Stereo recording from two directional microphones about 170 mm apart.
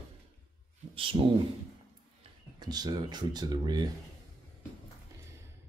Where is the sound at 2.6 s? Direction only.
25° right (ahead or behind).